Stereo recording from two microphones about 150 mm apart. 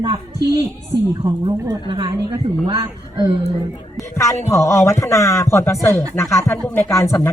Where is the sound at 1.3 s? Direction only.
30° right (ahead or behind).